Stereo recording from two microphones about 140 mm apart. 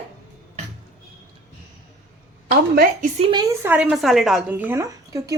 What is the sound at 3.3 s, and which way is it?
Speech, 30° right (ahead or behind).